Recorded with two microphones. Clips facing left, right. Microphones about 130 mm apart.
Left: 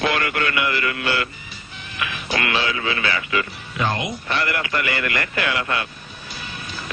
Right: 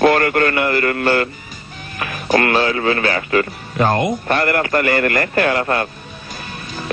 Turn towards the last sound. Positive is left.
turn(degrees=-45)  # may be behind; listen again after turning